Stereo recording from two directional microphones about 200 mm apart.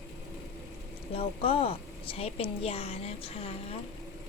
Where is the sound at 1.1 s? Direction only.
30° left (ahead or behind).